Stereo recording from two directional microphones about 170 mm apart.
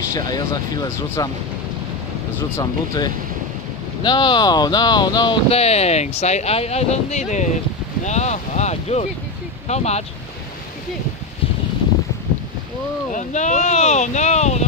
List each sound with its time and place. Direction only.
0.1 s speech: 20° left (ahead or behind)
2.5 s speech: 25° left (ahead or behind); by 10.0 s 40° left (ahead or behind)
13.1 s speech: 45° left (ahead or behind)